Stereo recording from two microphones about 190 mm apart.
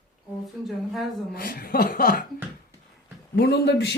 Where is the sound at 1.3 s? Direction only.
50° left (ahead or behind).